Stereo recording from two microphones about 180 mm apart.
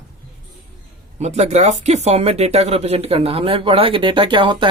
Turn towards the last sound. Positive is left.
turn(degrees=-25)  # may be behind; listen again after turning